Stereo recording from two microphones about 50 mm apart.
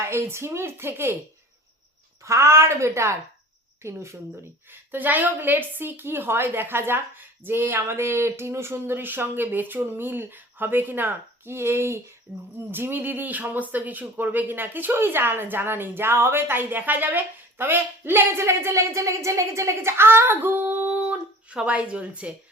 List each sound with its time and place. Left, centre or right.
0.0 s a woman's voice: right
2.2 s a woman's voice: right
3.8 s a woman's voice: right
4.7 s speech: right
12.3 s speech: centre
12.7 s speech: right
18.4 s speech: right
20.0 s speech: right